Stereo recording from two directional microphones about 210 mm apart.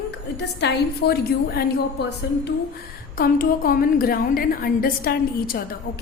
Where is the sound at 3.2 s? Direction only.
45° left (ahead or behind).